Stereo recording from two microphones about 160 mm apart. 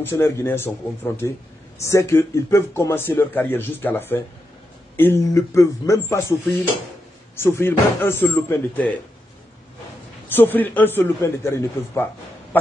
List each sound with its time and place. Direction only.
0.0 s speech: 15° left (ahead or behind)
10.2 s speech: 10° left (ahead or behind)